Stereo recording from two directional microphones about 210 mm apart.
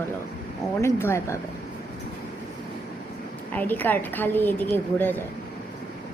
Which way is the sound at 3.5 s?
10° left (ahead or behind).